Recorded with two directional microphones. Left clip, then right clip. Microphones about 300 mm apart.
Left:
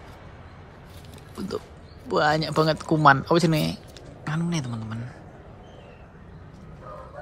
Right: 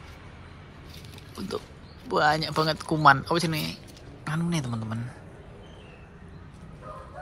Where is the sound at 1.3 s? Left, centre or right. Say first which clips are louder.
Left 2 dB; centre.